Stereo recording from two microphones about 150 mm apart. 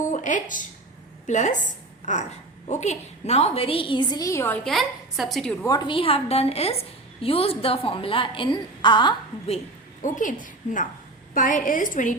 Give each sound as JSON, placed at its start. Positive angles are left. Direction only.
{"t": 0.0, "sound": "a sound", "side_deg": 55}
{"t": 1.3, "sound": "a woman's voice", "side_deg": 55}
{"t": 4.6, "sound": "a woman's voice", "side_deg": 0}
{"t": 5.6, "sound": "a woman's voice", "side_deg": 30}
{"t": 10.0, "sound": "a woman's voice", "side_deg": 60}